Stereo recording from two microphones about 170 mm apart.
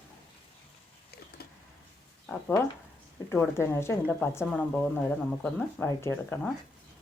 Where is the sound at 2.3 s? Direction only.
10° left (ahead or behind).